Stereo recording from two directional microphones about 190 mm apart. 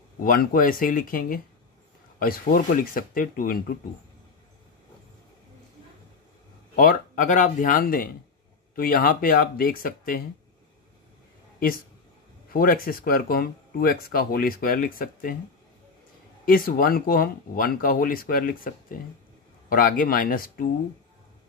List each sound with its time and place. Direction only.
0.2 s speech: 50° left (ahead or behind)
6.7 s speech: 45° left (ahead or behind)
12.5 s speech: 50° left (ahead or behind)
16.4 s speech: 50° left (ahead or behind)